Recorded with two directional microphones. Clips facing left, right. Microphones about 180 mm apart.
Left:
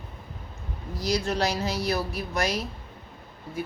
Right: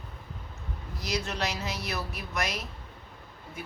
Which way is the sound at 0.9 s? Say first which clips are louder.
Left 6 dB; 35° left (ahead or behind).